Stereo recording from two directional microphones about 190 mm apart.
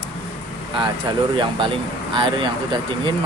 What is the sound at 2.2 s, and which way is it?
Speech, 25° right (ahead or behind).